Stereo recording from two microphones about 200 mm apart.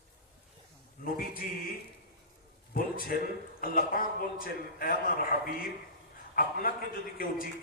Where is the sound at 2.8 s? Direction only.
45° left (ahead or behind).